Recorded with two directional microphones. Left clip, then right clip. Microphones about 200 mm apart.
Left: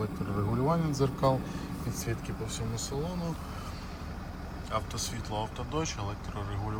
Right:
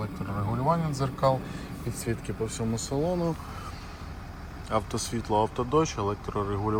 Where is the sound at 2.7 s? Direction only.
30° left (ahead or behind).